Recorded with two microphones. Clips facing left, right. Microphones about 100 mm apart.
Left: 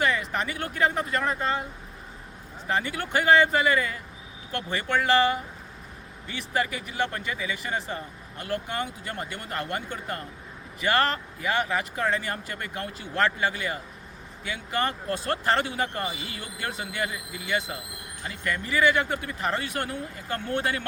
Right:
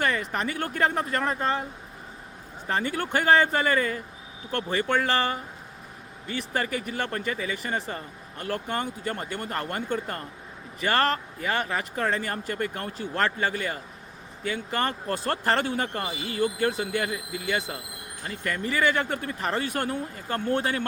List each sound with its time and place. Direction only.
0.0 s speech: 40° right (ahead or behind)
2.6 s speech: 35° right (ahead or behind)